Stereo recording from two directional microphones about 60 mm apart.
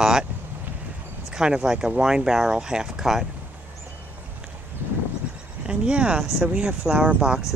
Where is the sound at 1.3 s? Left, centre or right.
Centre.